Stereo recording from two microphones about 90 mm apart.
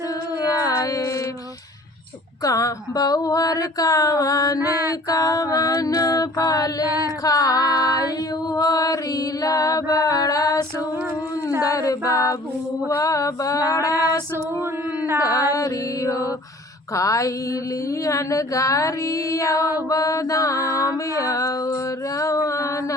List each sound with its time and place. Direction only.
0.6 s music: 40° left (ahead or behind)
2.4 s mantra: 40° left (ahead or behind)
4.2 s music: 40° left (ahead or behind)
11.6 s mantra: 40° left (ahead or behind)
13.9 s female singing: 25° right (ahead or behind)
15.2 s mantra: 40° left (ahead or behind)